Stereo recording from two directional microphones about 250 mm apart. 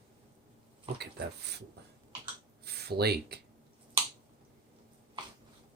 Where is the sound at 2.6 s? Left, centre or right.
Right.